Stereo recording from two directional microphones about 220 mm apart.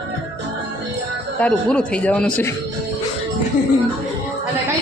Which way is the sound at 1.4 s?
5° left (ahead or behind).